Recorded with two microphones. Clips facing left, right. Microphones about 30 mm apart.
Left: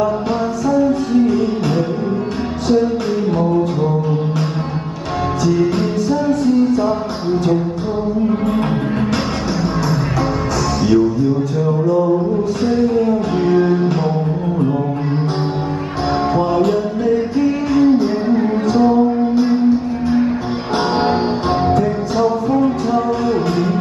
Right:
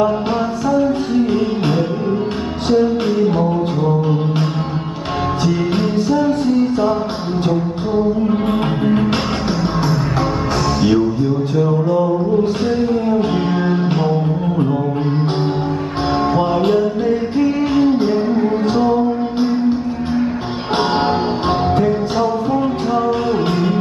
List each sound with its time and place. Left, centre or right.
3.3 s music: right
5.4 s music: right
10.8 s music: right
12.8 s music: right
16.7 s music: right